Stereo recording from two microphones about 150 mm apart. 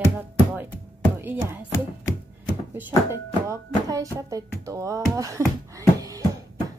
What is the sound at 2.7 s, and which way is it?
Speech, 20° right (ahead or behind).